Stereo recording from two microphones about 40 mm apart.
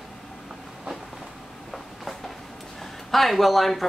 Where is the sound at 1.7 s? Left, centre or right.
Centre.